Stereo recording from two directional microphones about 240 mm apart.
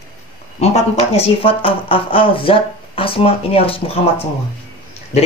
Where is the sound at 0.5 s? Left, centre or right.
Left.